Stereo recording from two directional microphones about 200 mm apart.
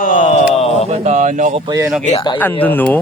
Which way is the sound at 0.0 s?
40° left (ahead or behind).